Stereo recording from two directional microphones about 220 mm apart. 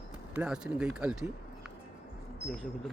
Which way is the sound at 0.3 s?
5° right (ahead or behind).